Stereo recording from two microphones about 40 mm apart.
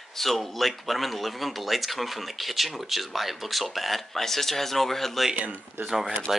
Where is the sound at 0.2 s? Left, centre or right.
Centre.